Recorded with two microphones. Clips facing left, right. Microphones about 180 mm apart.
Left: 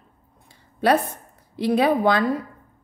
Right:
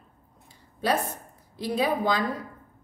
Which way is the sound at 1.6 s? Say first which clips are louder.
Left 7 dB; 65° left (ahead or behind).